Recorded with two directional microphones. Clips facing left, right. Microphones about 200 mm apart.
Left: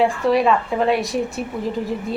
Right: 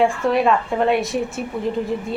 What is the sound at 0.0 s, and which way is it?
A woman's voice, centre (ahead or behind).